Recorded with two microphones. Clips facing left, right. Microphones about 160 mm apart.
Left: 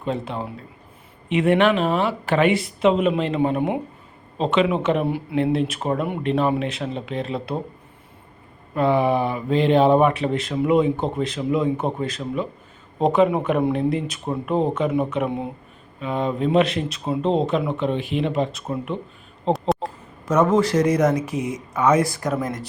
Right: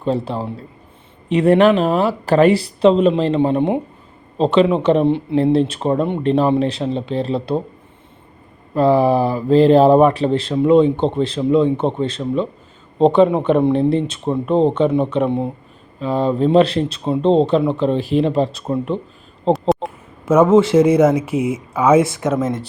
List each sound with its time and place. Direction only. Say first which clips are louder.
0.0 s speech: right 6 dB; 35° right (ahead or behind)
8.7 s speech: right 5 dB; 35° right (ahead or behind)
19.5 s a sound: right 5 dB; centre (ahead or behind)
19.8 s a sound: right 3 dB; 25° right (ahead or behind)
20.5 s speech: right 7 dB; 25° right (ahead or behind)
22.0 s speech: right 5 dB; centre (ahead or behind)